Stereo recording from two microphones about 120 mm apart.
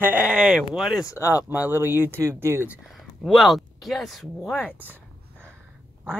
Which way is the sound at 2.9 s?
Centre (ahead or behind).